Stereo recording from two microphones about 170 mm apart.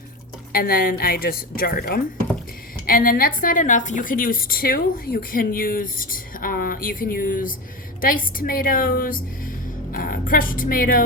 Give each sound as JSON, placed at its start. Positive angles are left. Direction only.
{"t": 0.5, "sound": "a woman's voice", "side_deg": 60}